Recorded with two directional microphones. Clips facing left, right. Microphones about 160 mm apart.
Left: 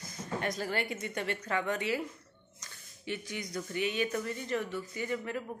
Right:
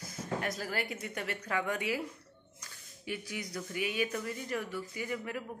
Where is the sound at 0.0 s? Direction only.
5° right (ahead or behind).